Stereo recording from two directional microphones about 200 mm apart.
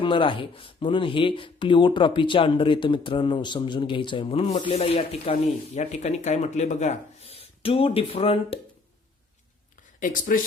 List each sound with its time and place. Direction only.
0.0 s speech: 25° left (ahead or behind)
10.0 s speech: 40° left (ahead or behind)